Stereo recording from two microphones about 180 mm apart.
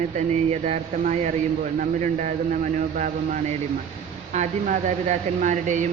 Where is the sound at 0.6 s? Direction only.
45° right (ahead or behind).